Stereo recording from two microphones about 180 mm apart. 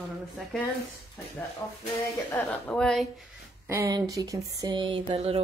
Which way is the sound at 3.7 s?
15° right (ahead or behind).